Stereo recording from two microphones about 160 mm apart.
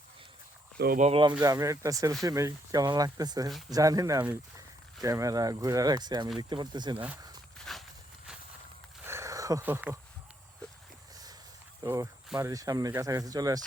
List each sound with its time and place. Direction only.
0.9 s speech: 45° right (ahead or behind)
1.2 s speech: 25° right (ahead or behind)
7.6 s walk: centre (ahead or behind)
9.0 s a sound: 20° right (ahead or behind)
11.8 s speech: 20° right (ahead or behind)